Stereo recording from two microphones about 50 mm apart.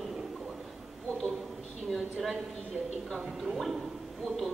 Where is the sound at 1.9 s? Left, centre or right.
Centre.